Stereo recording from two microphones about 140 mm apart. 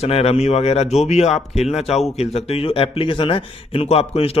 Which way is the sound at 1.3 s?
Centre (ahead or behind).